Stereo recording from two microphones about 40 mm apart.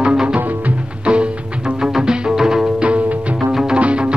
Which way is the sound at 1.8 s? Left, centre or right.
Centre.